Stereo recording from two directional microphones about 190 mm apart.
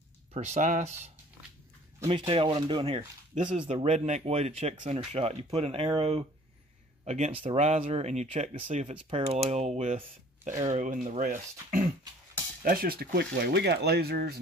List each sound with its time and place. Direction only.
0.3 s speech: 35° right (ahead or behind); by 14.4 s 55° right (ahead or behind)